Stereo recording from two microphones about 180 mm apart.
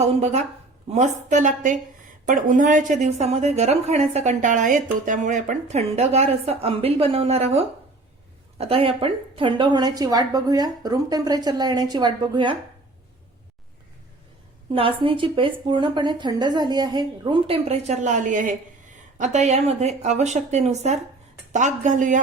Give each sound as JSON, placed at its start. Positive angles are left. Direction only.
{"t": 0.0, "sound": "a woman's voice", "side_deg": -40}
{"t": 14.7, "sound": "a woman's voice", "side_deg": -30}